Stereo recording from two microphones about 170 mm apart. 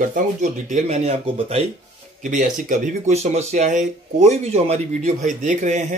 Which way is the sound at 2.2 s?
50° right (ahead or behind).